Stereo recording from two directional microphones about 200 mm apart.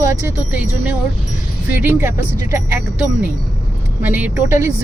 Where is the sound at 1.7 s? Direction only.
10° right (ahead or behind).